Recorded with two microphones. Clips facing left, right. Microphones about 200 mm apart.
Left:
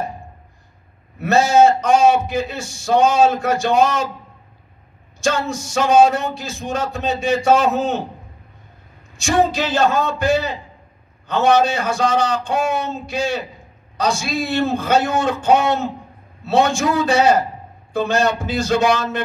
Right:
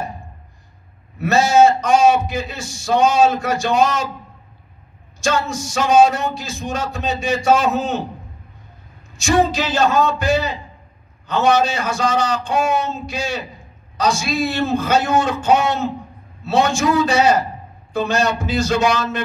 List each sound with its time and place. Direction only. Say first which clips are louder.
1.2 s a man's voice: even; 55° left (ahead or behind)
5.2 s a man's voice: even; 55° left (ahead or behind)
9.1 s a man's voice: right 1 dB; 55° left (ahead or behind)